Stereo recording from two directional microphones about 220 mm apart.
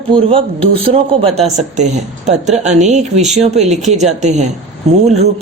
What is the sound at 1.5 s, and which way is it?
Speech, 30° right (ahead or behind).